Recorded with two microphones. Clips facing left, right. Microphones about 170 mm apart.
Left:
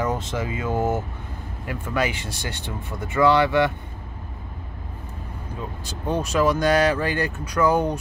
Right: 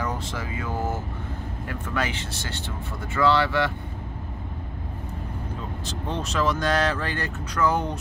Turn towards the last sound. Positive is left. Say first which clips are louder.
# left 4 dB
turn(degrees=10)  # may be behind; listen again after turning